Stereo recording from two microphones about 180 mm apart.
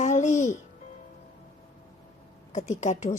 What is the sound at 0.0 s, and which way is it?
Music, 40° left (ahead or behind).